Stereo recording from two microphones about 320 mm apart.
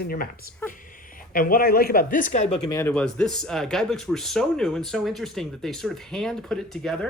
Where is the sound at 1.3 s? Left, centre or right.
Left.